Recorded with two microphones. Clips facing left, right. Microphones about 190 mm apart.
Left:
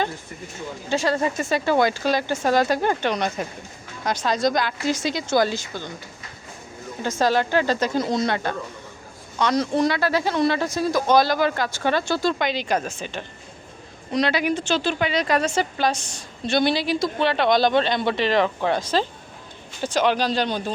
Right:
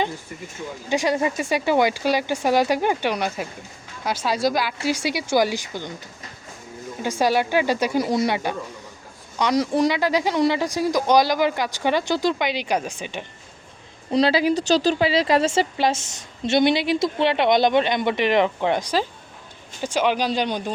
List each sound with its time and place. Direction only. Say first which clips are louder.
0.9 s speech: right 1 dB; 15° right (ahead or behind)
7.0 s speech: even; 10° right (ahead or behind)
14.1 s speech: right 3 dB; 30° right (ahead or behind); by 20.7 s 15° right (ahead or behind)